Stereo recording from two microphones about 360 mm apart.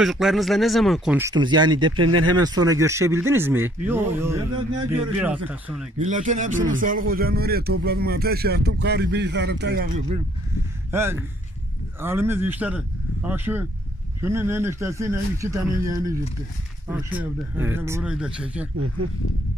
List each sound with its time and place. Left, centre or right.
0.0 s speech: centre
2.0 s speech: right
2.3 s speech: centre
5.9 s speech: centre
10.9 s speech: centre